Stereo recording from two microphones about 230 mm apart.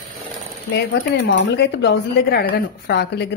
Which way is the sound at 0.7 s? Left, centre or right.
Left.